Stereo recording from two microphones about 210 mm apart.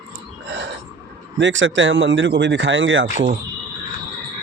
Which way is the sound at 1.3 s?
60° right (ahead or behind).